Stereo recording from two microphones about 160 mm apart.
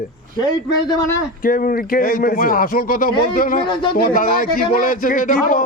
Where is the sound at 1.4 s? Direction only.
60° left (ahead or behind).